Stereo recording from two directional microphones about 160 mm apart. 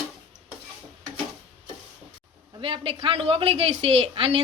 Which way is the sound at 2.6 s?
35° right (ahead or behind).